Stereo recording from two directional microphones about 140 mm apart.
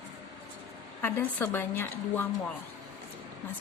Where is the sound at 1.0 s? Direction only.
15° left (ahead or behind).